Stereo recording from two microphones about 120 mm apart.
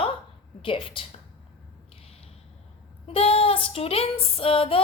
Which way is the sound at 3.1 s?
50° left (ahead or behind).